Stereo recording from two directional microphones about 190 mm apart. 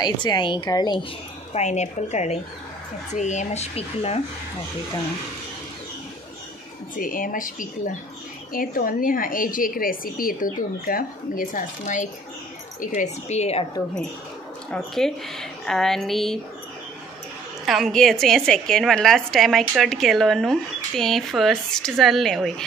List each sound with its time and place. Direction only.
0.0 s a woman's voice: 25° left (ahead or behind)
1.5 s speech: 35° left (ahead or behind)
7.0 s a woman's voice: 45° left (ahead or behind)
14.7 s a woman's voice: centre (ahead or behind)
17.6 s a woman's voice: centre (ahead or behind)